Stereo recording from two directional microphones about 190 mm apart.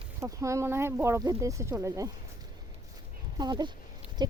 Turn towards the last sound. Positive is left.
turn(degrees=-20)  # may be behind; listen again after turning